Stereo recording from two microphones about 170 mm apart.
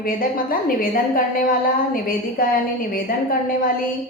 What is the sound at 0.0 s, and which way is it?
A woman's voice, 60° left (ahead or behind).